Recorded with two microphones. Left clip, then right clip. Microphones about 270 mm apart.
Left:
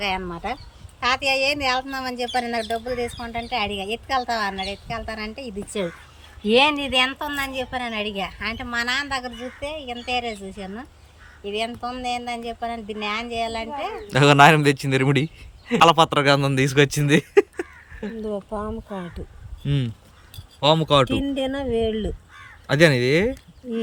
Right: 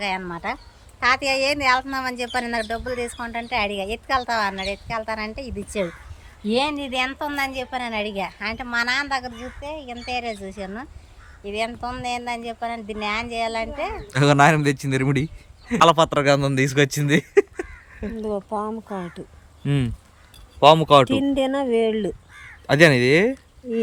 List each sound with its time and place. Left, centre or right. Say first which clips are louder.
0.0 s speech: even; centre
6.4 s speech: left 5 dB; centre